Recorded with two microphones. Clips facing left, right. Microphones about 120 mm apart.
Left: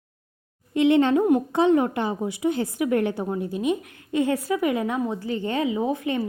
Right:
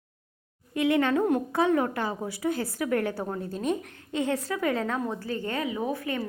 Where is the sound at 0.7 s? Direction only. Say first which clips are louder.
Left 6 dB; 25° left (ahead or behind).